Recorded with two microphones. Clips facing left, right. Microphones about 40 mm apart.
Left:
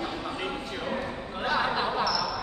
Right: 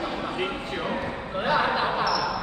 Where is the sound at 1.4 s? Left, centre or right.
Centre.